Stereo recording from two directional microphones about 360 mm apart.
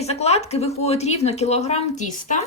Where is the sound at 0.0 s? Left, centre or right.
Centre.